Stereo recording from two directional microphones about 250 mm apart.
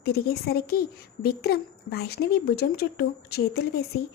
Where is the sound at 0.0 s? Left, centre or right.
Left.